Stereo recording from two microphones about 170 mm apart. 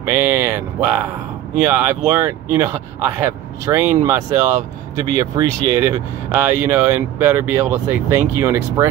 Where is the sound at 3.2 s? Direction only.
15° right (ahead or behind).